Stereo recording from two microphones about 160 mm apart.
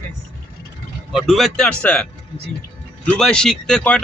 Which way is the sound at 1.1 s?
Centre (ahead or behind).